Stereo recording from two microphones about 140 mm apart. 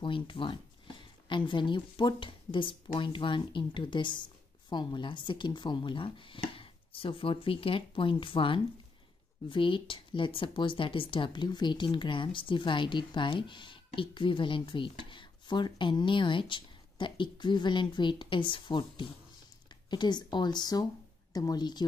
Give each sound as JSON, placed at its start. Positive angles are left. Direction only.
{"t": 0.0, "sound": "a woman's voice", "side_deg": 35}